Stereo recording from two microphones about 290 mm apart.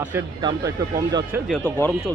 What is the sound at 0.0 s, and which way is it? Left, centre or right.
Speech, centre.